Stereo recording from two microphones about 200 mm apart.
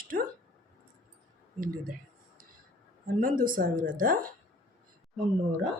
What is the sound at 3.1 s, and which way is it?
Speech, 40° right (ahead or behind).